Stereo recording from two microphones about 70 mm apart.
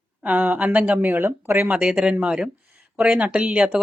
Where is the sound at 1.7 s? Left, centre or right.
Centre.